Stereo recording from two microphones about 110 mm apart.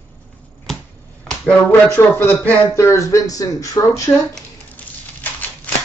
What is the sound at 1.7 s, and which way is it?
Speech, 20° left (ahead or behind).